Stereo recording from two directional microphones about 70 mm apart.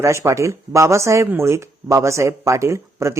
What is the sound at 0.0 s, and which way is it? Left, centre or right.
Speech, right.